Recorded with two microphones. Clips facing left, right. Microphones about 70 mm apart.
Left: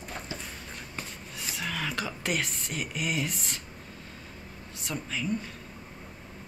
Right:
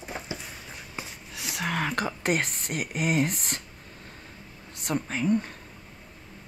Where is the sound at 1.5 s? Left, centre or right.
Right.